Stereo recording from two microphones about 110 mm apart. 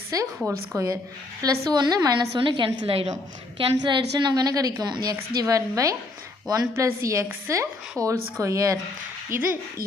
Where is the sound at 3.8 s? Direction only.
45° right (ahead or behind); by 8.8 s 30° right (ahead or behind).